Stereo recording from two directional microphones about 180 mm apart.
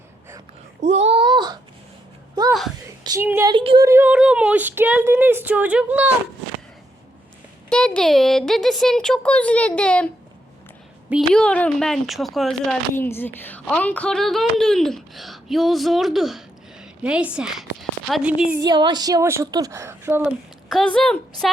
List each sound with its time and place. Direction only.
0.8 s a sound: 35° right (ahead or behind)
2.5 s a woman's voice: centre (ahead or behind)
3.0 s a woman's voice: 20° right (ahead or behind)
3.5 s a woman's voice: 30° right (ahead or behind)
3.8 s speech: 10° right (ahead or behind)
7.7 s a woman's voice: 5° left (ahead or behind)
11.3 s a woman's voice: 5° left (ahead or behind)
13.0 s a woman's voice: 10° left (ahead or behind); by 18.6 s 5° right (ahead or behind)
18.6 s a woman's voice: 25° right (ahead or behind)
20.7 s a woman's voice: 5° left (ahead or behind)